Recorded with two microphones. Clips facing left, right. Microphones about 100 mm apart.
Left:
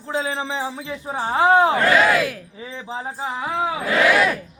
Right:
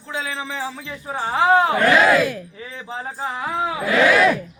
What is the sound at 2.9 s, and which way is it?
Speech, 20° left (ahead or behind).